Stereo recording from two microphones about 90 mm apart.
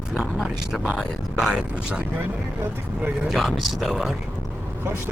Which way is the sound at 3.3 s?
Centre (ahead or behind).